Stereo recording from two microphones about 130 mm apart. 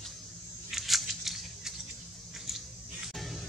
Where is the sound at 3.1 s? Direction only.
Centre (ahead or behind).